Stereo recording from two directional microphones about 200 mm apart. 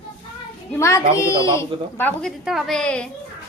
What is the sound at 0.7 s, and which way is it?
A woman's voice, 15° left (ahead or behind).